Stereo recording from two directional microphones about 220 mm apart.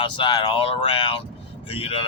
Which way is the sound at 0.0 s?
20° left (ahead or behind).